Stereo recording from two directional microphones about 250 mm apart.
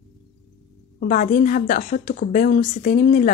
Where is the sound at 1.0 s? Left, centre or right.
Left.